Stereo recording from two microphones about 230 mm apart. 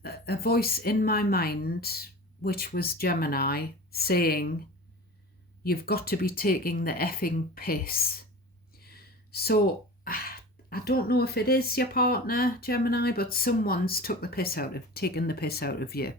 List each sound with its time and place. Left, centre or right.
0.0 s speech: left
5.6 s speech: left